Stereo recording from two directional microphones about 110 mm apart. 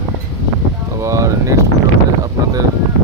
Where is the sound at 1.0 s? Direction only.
25° right (ahead or behind).